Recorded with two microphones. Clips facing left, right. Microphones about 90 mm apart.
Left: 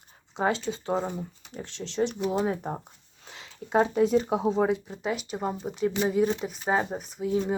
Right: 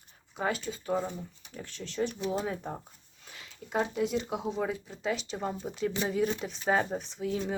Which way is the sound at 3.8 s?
40° left (ahead or behind).